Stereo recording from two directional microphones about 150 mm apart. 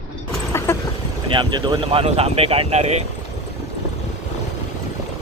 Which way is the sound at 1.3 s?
35° right (ahead or behind).